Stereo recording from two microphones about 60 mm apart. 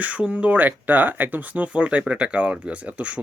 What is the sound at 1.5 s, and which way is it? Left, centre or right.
Speech, right.